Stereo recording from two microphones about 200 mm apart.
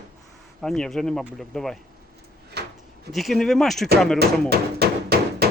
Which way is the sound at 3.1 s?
Centre (ahead or behind).